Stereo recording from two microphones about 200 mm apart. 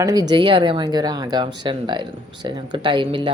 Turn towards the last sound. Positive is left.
turn(degrees=-25)  # may be behind; listen again after turning